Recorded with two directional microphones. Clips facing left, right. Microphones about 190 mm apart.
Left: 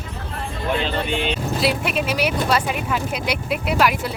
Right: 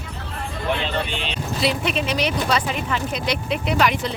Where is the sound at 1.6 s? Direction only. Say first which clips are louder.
Right 1 dB; 5° left (ahead or behind).